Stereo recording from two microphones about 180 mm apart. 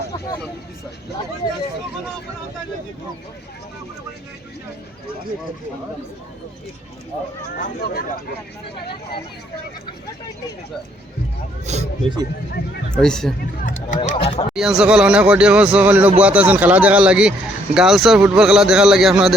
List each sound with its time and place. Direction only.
7.5 s speech: 55° left (ahead or behind)
11.6 s speech: 40° right (ahead or behind)
13.0 s speech: 5° left (ahead or behind)
13.7 s speech: 45° left (ahead or behind)
14.5 s speech: 5° right (ahead or behind)